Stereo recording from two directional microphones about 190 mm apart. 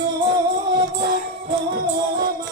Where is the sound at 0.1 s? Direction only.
20° right (ahead or behind).